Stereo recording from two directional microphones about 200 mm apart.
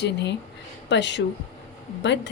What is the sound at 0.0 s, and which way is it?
Speech, 60° left (ahead or behind).